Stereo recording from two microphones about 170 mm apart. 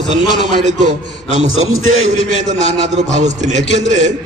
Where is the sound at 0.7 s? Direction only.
45° right (ahead or behind).